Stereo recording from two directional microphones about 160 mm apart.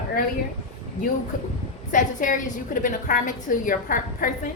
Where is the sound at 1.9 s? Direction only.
55° left (ahead or behind).